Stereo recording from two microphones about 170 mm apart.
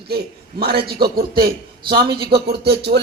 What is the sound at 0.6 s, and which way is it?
A man's voice, 65° right (ahead or behind).